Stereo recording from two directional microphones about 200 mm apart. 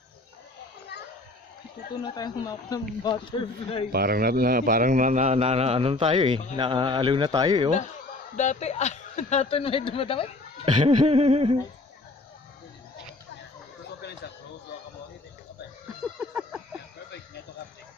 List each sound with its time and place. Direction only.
2.0 s speech: 20° left (ahead or behind)
3.9 s a man's voice: 50° right (ahead or behind); by 7.7 s 20° right (ahead or behind)
8.4 s speech: 35° left (ahead or behind)
10.6 s a man's voice: 35° right (ahead or behind)
14.0 s a sound: 55° left (ahead or behind)
16.2 s a sound: 5° right (ahead or behind)